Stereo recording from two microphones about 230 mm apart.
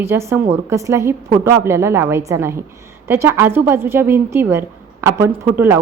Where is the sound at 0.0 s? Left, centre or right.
Centre.